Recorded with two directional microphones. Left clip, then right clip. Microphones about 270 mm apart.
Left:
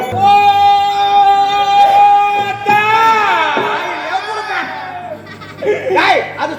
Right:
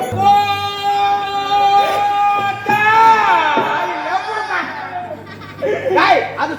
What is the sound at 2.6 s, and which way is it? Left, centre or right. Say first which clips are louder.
Music: even; left.